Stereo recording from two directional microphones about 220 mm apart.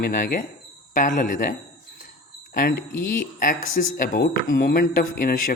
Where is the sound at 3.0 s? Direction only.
35° left (ahead or behind).